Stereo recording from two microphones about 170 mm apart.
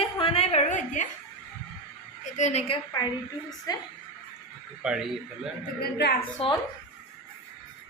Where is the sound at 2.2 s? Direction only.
40° left (ahead or behind).